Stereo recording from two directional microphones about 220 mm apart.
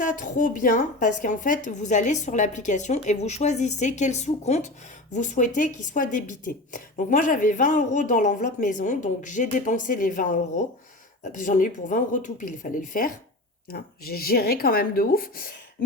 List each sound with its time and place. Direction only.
0.0 s a woman's voice: 35° left (ahead or behind)